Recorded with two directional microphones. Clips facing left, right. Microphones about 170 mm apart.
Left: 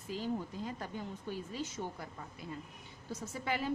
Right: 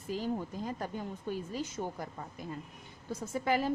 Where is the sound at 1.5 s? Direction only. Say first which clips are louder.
Right 3 dB; 45° right (ahead or behind).